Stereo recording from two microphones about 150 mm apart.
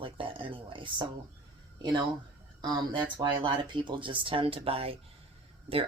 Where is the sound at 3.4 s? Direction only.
30° right (ahead or behind).